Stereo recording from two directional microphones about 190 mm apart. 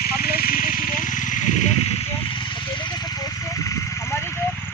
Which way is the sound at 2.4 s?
25° left (ahead or behind).